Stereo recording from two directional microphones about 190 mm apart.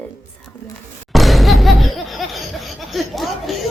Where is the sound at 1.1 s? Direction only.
Centre (ahead or behind).